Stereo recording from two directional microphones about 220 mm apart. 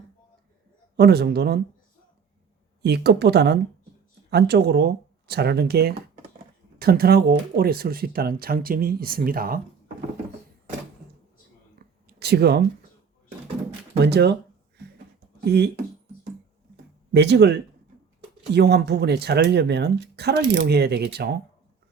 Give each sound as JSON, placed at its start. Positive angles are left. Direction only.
{"t": 0.9, "sound": "speech", "side_deg": -45}
{"t": 2.8, "sound": "speech", "side_deg": -50}
{"t": 12.0, "sound": "a sound", "side_deg": -45}
{"t": 14.0, "sound": "speech", "side_deg": -50}
{"t": 14.8, "sound": "a sound", "side_deg": -50}
{"t": 17.1, "sound": "speech", "side_deg": -50}